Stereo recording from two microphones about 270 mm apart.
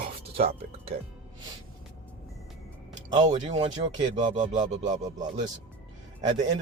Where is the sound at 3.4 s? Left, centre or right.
Right.